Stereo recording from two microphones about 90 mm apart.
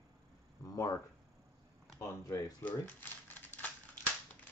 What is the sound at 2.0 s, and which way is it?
Speech, 35° left (ahead or behind).